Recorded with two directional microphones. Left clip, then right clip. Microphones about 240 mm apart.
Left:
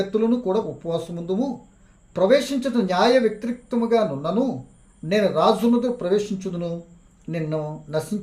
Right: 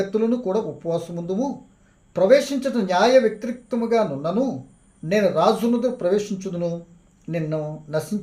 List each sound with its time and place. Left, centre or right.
0.1 s speech: centre